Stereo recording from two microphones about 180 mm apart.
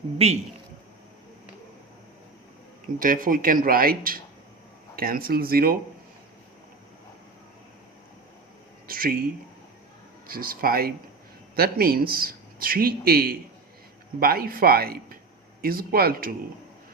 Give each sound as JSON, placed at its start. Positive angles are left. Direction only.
{"t": 0.2, "sound": "a man's voice", "side_deg": -35}
{"t": 3.0, "sound": "speech", "side_deg": -50}
{"t": 8.9, "sound": "a sound", "side_deg": -50}
{"t": 10.2, "sound": "speech", "side_deg": -50}